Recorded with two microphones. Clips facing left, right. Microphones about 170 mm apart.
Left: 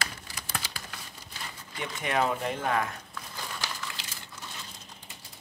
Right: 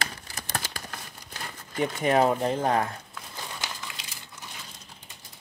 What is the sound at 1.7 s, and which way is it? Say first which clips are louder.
Speech: right 8 dB; 40° right (ahead or behind).